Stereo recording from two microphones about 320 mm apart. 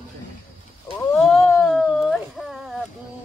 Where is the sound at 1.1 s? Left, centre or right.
Centre.